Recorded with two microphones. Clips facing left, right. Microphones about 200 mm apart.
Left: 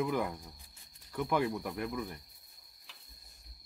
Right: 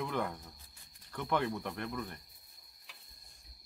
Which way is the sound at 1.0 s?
10° left (ahead or behind).